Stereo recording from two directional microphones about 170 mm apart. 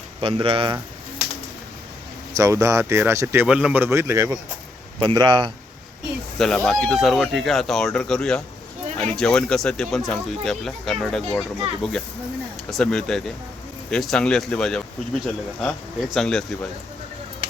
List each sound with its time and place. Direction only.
0.2 s speech: 30° right (ahead or behind)
2.3 s speech: 20° right (ahead or behind)
6.4 s speech: centre (ahead or behind)
16.1 s speech: 5° left (ahead or behind)